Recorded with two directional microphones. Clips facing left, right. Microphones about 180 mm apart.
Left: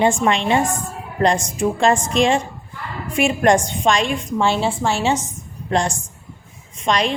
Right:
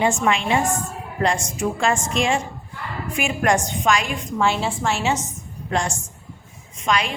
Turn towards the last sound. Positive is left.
turn(degrees=35)  # may be behind; listen again after turning